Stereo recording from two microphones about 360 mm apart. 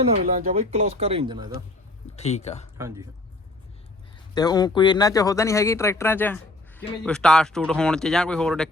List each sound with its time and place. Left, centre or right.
0.4 s speech: centre
2.1 s speech: centre
2.7 s speech: centre
4.4 s speech: centre